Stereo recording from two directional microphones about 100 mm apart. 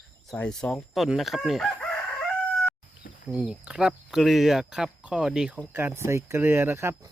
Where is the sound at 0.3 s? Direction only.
10° left (ahead or behind).